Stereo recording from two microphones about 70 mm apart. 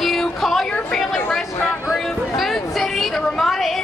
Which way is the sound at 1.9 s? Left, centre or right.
Centre.